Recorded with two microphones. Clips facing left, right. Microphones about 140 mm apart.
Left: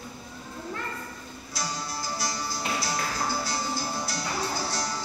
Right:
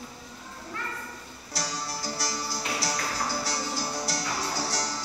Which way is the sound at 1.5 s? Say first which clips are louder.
Even; 70° right (ahead or behind).